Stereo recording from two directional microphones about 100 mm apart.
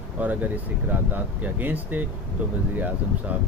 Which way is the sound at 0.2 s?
15° right (ahead or behind).